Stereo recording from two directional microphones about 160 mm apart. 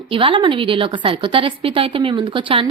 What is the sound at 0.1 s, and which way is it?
A woman's voice, 30° right (ahead or behind).